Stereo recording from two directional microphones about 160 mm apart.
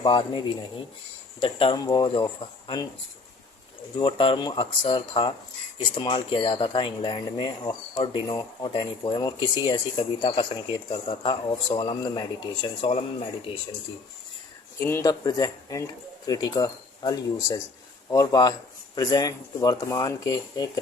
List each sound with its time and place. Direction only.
0.0 s speech: 30° left (ahead or behind)
4.0 s speech: 35° left (ahead or behind)
14.8 s speech: 15° left (ahead or behind)